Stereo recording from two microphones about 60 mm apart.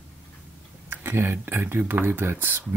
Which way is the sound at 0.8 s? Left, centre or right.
Right.